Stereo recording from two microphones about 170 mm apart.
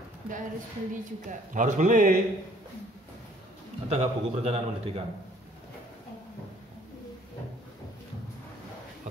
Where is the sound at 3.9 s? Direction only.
40° right (ahead or behind).